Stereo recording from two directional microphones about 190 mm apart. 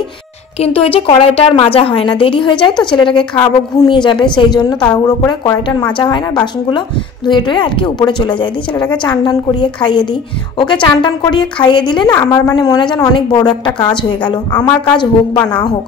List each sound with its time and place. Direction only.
0.6 s a woman's voice: 30° left (ahead or behind)
4.7 s a woman's voice: 5° left (ahead or behind)
5.4 s a woman's voice: 20° left (ahead or behind)